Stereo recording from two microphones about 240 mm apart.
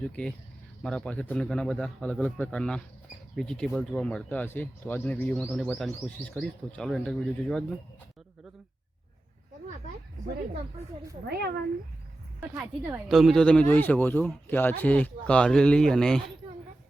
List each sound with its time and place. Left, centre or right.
0.0 s speech: centre
11.3 s speech: right
12.5 s speech: centre